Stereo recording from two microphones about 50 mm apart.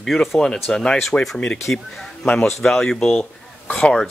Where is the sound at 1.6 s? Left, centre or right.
Centre.